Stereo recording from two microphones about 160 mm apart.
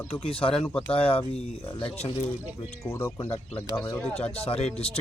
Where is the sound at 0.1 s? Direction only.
35° left (ahead or behind).